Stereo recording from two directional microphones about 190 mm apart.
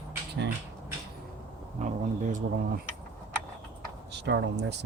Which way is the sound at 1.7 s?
40° right (ahead or behind).